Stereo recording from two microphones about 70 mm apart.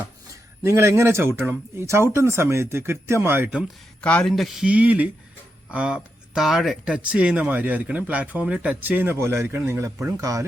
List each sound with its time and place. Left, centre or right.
0.6 s speech: right
4.0 s a man's voice: centre
4.3 s speech: centre
4.6 s speech: centre
6.8 s speech: centre
9.1 s speech: right